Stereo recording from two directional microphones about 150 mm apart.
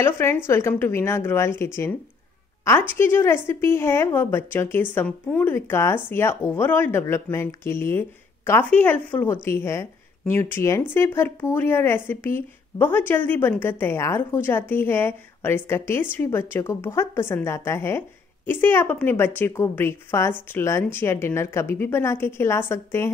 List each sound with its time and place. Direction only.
0.0 s a woman's voice: 15° left (ahead or behind)